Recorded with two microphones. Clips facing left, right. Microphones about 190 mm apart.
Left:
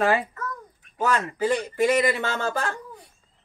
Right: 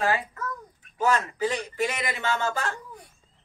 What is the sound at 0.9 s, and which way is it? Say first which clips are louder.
A man's voice: even; 55° left (ahead or behind).